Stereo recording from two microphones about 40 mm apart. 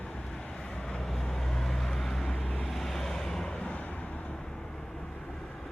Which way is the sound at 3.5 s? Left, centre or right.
Left.